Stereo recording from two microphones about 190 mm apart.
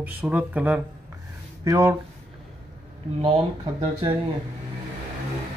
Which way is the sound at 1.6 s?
20° right (ahead or behind).